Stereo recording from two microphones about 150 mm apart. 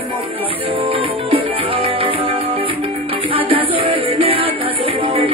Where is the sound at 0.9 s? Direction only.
40° right (ahead or behind).